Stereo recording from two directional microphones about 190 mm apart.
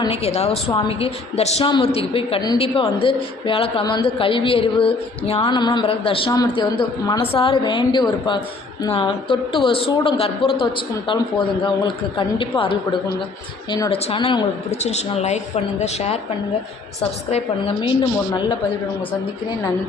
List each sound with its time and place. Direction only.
0.0 s a woman's voice: 30° left (ahead or behind)
14.7 s a woman's voice: 35° left (ahead or behind)
17.3 s a woman's voice: 25° left (ahead or behind)